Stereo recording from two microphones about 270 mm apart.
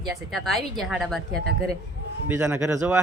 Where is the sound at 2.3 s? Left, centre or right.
Centre.